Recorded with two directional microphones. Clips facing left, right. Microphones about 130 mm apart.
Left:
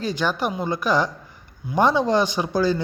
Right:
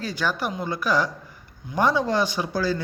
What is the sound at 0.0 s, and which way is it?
A man's voice, 20° left (ahead or behind).